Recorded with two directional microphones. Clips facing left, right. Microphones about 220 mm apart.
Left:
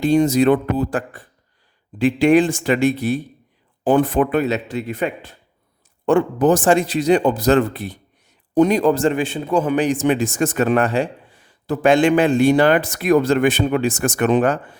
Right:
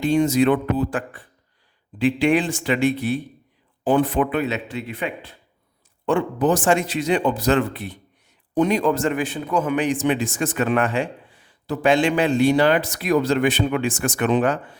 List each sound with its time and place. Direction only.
0.0 s a man's voice: 40° left (ahead or behind)